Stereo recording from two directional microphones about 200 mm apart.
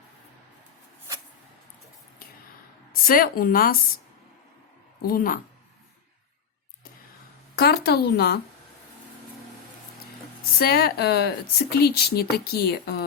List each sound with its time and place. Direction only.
2.9 s speech: 45° left (ahead or behind)
5.0 s speech: 45° left (ahead or behind)
7.5 s speech: 50° left (ahead or behind)
10.6 s speech: 50° left (ahead or behind)